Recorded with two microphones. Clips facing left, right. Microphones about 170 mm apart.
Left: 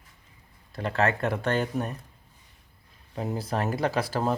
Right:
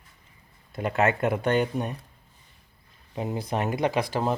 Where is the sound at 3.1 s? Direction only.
10° right (ahead or behind).